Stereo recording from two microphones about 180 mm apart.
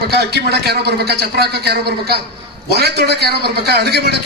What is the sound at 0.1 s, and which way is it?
A man's voice, 65° right (ahead or behind).